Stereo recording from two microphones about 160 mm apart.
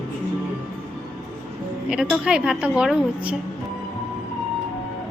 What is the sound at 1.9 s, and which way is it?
A woman's voice, 5° right (ahead or behind).